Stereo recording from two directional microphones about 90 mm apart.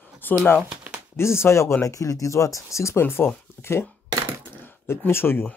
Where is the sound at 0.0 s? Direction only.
20° left (ahead or behind).